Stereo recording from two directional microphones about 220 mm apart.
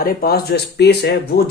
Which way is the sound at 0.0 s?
45° left (ahead or behind).